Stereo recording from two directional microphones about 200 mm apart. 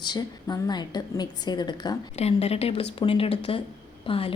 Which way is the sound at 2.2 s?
30° left (ahead or behind).